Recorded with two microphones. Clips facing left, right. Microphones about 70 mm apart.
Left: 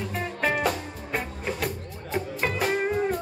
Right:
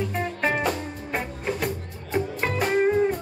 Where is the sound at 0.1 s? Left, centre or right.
Centre.